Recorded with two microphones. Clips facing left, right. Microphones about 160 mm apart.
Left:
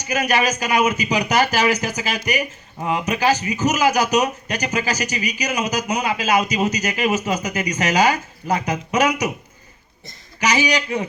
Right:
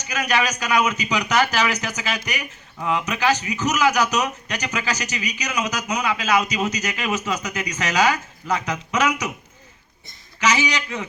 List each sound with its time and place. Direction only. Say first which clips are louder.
0.2 s speech: left 2 dB; 35° left (ahead or behind)
10.7 s speech: left 6 dB; 35° left (ahead or behind)